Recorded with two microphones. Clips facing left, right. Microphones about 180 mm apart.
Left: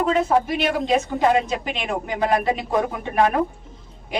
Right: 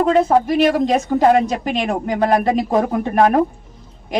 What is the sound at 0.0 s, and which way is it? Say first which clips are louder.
Speech: right 5 dB; 40° right (ahead or behind).